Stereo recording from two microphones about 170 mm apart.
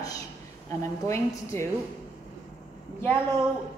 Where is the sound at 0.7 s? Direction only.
15° left (ahead or behind).